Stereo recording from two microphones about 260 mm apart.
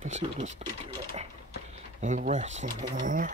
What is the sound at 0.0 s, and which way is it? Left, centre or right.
Speech, right.